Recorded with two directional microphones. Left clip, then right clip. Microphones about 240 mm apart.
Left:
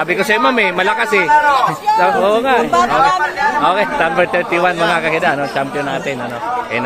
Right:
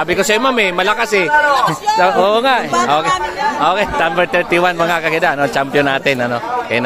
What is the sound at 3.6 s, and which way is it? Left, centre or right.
Speech, centre.